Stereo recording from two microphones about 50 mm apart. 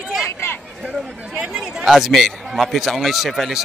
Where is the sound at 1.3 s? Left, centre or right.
Right.